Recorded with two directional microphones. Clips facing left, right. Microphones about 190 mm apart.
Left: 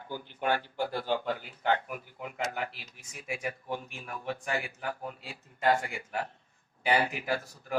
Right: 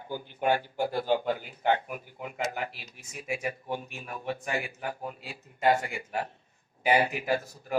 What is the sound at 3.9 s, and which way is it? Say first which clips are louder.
Speech: right 2 dB; 15° right (ahead or behind).